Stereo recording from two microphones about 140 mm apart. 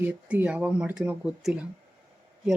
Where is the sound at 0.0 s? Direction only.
10° right (ahead or behind).